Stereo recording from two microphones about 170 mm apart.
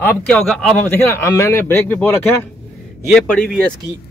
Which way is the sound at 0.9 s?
15° left (ahead or behind).